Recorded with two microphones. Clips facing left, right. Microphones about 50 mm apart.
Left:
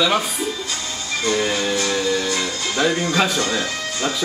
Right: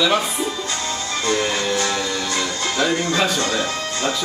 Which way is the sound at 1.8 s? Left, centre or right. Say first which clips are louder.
Left 1 dB; right.